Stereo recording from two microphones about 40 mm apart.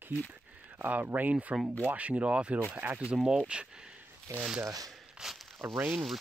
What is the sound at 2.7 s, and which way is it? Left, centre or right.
Speech, right.